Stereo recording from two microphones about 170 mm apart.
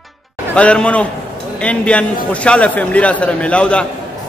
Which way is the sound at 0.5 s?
5° left (ahead or behind).